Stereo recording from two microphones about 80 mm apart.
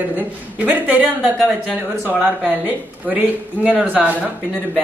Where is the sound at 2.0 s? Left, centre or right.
Centre.